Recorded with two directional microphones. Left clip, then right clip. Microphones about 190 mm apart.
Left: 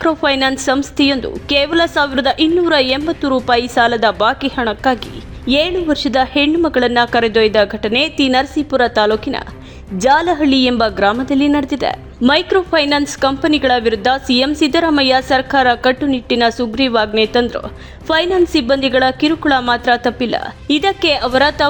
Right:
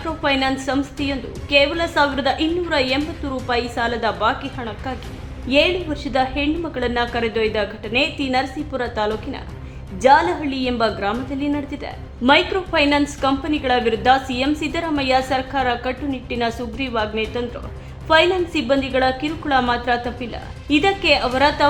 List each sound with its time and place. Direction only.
0.0 s a woman's voice: 50° left (ahead or behind)